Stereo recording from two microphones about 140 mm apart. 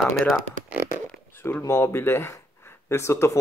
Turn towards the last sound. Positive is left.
turn(degrees=20)  # may be behind; listen again after turning